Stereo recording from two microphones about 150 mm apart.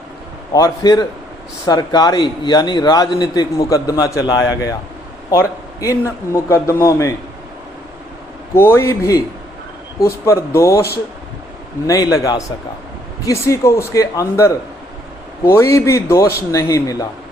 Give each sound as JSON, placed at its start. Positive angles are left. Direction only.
{"t": 0.5, "sound": "a man's voice", "side_deg": 25}
{"t": 8.5, "sound": "a man's voice", "side_deg": 15}
{"t": 12.1, "sound": "a man's voice", "side_deg": 25}